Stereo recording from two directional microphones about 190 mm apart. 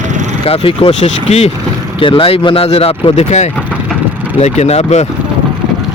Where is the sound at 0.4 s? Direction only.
30° left (ahead or behind).